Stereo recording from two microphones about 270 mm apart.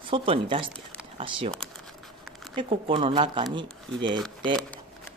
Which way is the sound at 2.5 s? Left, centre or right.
Centre.